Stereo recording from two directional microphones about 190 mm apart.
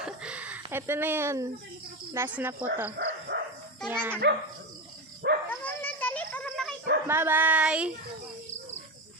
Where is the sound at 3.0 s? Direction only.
60° right (ahead or behind).